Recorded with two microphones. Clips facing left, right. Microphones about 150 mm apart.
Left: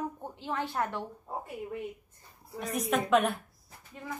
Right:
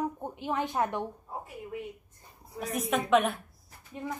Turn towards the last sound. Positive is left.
turn(degrees=-20)  # may be behind; listen again after turning